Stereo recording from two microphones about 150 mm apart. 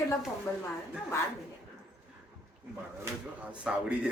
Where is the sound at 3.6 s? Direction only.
5° right (ahead or behind).